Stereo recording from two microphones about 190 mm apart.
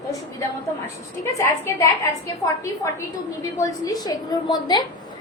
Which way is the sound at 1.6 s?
10° left (ahead or behind).